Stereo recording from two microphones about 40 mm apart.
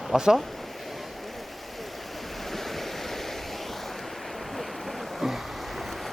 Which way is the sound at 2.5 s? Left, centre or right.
Centre.